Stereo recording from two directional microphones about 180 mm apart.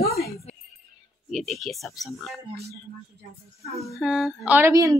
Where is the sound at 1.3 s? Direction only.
Centre (ahead or behind).